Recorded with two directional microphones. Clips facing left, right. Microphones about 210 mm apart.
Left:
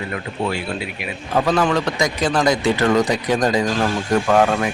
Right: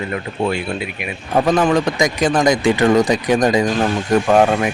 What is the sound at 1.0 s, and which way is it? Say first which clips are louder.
A man's voice: right 3 dB; 15° right (ahead or behind).